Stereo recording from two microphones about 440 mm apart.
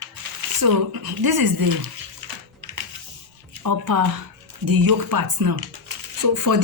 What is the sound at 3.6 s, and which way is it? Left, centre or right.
Speech, right.